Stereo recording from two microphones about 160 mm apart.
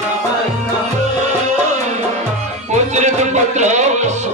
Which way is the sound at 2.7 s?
45° right (ahead or behind).